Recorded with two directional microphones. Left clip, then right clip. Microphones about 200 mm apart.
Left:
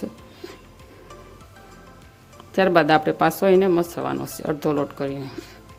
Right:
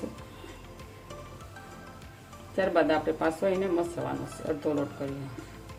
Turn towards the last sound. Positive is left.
turn(degrees=50)  # may be behind; listen again after turning